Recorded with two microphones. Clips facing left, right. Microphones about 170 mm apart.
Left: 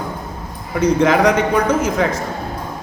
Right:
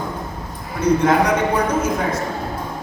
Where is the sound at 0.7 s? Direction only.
90° left.